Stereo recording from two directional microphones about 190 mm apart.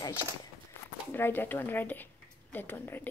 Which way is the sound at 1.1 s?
10° left (ahead or behind).